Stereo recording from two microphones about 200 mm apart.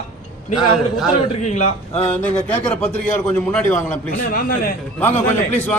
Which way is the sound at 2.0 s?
10° left (ahead or behind).